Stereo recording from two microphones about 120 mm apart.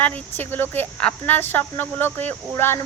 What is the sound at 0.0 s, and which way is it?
Speech, 15° left (ahead or behind).